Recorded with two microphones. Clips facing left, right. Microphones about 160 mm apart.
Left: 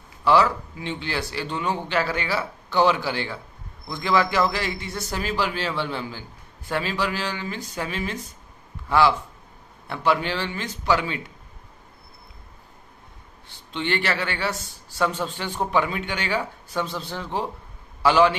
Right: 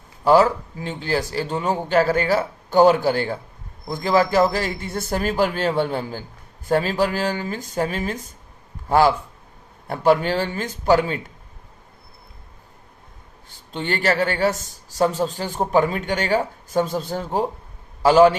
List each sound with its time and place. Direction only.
0.3 s a man's voice: 40° right (ahead or behind)
13.7 s a man's voice: 45° right (ahead or behind)